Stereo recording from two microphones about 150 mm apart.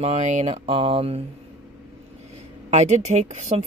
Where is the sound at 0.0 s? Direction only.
50° right (ahead or behind).